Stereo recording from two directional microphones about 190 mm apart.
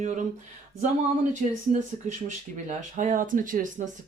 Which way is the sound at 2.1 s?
40° right (ahead or behind).